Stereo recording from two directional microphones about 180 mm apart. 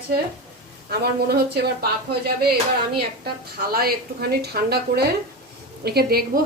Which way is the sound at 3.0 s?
60° right (ahead or behind).